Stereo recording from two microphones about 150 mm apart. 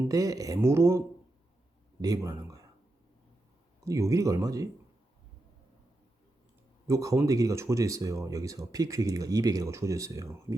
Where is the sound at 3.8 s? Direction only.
20° right (ahead or behind).